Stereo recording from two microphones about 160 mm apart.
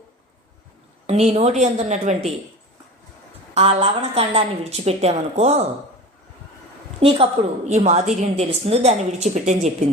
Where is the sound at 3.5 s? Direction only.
40° right (ahead or behind).